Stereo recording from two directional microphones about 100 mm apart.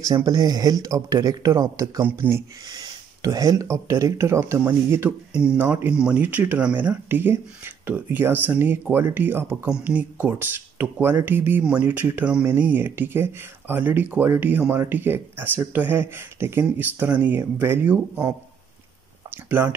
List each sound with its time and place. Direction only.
0.2 s speech: 45° right (ahead or behind); by 2.4 s 25° right (ahead or behind)
2.7 s a sound: 40° right (ahead or behind)
3.3 s speech: 35° right (ahead or behind)
19.3 s speech: 20° right (ahead or behind)